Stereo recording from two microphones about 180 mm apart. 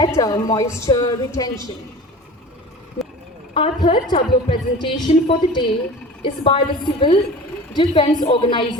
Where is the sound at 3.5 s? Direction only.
30° left (ahead or behind).